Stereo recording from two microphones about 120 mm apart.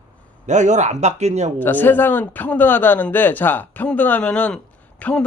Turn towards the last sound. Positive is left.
turn(degrees=10)  # may be behind; listen again after turning